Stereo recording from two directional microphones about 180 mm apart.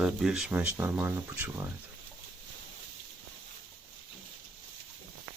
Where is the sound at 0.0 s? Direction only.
Centre (ahead or behind).